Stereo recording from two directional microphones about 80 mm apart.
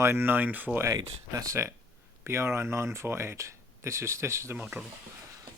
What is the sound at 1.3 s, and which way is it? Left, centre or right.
Speech, right.